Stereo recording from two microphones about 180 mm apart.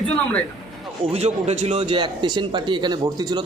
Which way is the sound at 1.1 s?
35° right (ahead or behind).